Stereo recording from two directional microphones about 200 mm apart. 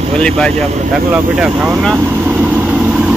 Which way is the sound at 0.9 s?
5° right (ahead or behind).